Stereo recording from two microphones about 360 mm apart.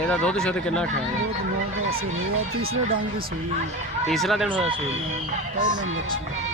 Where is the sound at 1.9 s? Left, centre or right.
Right.